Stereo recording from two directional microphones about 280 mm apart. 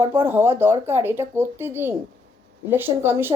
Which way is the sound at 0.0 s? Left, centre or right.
Centre.